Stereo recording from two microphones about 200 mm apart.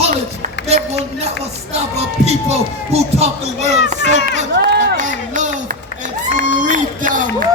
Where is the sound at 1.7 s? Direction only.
30° right (ahead or behind).